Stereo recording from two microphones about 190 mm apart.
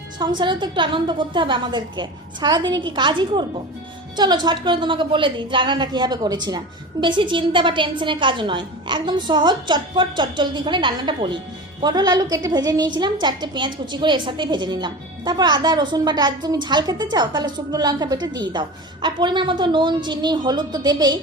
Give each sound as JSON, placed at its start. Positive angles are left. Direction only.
{"t": 0.2, "sound": "a woman's voice", "side_deg": -25}